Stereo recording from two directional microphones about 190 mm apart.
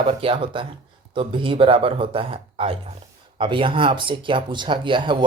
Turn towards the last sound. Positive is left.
turn(degrees=-25)  # may be behind; listen again after turning